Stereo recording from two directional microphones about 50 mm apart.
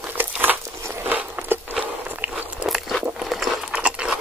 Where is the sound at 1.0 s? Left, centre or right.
Right.